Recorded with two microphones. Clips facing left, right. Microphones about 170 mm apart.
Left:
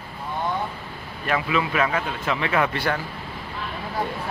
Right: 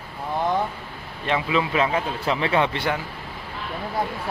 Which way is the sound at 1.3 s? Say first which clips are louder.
Right 1 dB; 25° right (ahead or behind).